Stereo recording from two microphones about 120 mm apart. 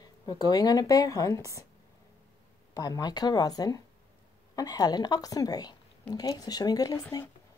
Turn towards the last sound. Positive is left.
turn(degrees=30)  # may be behind; listen again after turning